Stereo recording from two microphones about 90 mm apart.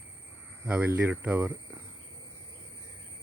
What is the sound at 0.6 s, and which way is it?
Speech, 15° right (ahead or behind).